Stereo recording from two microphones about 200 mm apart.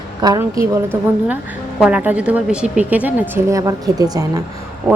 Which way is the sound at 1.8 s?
5° right (ahead or behind).